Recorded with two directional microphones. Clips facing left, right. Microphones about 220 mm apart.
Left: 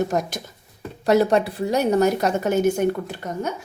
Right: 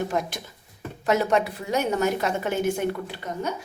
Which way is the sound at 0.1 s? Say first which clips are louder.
Left 3 dB; 45° left (ahead or behind).